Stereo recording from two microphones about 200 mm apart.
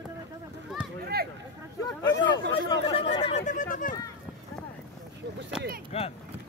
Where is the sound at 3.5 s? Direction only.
40° left (ahead or behind).